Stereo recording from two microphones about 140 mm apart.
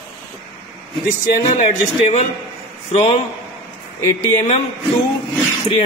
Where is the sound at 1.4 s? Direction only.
55° left (ahead or behind).